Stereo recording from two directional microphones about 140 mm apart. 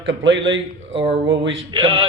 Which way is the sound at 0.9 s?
45° right (ahead or behind).